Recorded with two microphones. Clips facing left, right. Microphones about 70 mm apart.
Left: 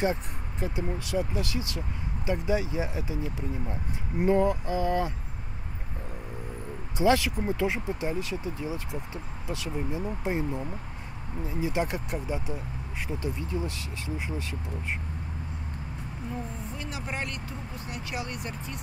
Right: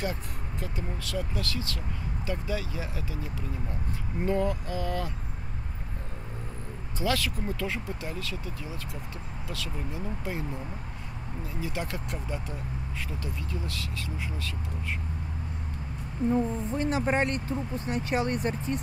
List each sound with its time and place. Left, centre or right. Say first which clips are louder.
0.0 s speech: left 5 dB; left
7.0 s speech: left 6 dB; left
16.7 s speech: right 10 dB; right